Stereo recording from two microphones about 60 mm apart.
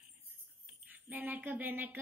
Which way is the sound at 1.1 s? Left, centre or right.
Right.